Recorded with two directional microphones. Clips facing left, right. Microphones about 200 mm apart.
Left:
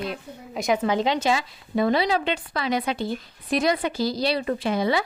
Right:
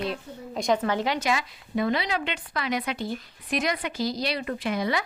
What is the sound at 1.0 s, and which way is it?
Speech, 25° left (ahead or behind).